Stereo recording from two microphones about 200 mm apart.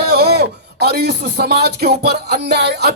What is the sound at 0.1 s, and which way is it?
Speech, 50° right (ahead or behind).